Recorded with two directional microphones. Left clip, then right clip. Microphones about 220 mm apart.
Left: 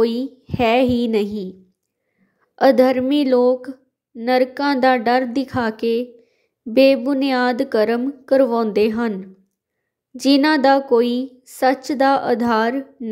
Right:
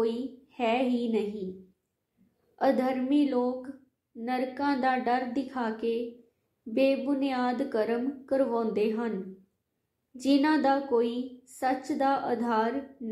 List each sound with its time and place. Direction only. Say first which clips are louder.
0.0 s speech: left 11 dB; 50° left (ahead or behind)
2.5 s speech: left 13 dB; 50° left (ahead or behind)
10.1 s speech: left 10 dB; 50° left (ahead or behind)